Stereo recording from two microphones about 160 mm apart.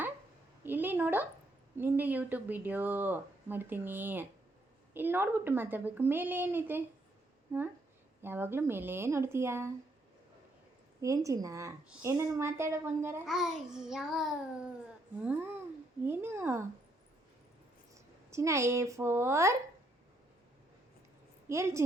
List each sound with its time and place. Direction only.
0.6 s a sound: 15° right (ahead or behind)
1.8 s speech: 10° right (ahead or behind)
11.0 s a woman's voice: 20° right (ahead or behind)
13.2 s babbling: centre (ahead or behind)
15.2 s speech: 10° right (ahead or behind)
18.3 s speech: 20° right (ahead or behind)
21.5 s speech: 15° right (ahead or behind)